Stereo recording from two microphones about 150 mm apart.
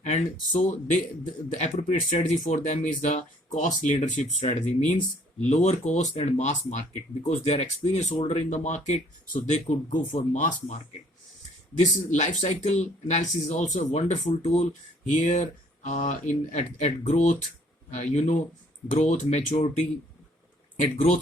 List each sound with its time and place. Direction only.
0.0 s speech: 55° left (ahead or behind)